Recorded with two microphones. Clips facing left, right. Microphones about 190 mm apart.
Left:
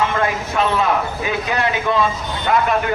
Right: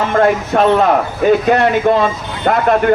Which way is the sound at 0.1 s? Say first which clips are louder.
Right 8 dB; 50° right (ahead or behind).